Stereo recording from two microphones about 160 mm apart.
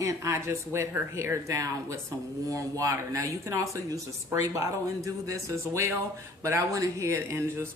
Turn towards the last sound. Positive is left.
turn(degrees=-20)  # may be behind; listen again after turning